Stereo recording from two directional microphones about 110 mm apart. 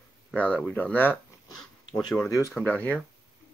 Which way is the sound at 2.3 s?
25° left (ahead or behind).